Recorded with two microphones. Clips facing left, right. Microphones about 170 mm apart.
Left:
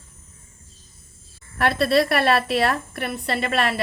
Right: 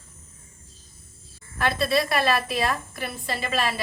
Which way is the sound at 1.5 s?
65° left (ahead or behind).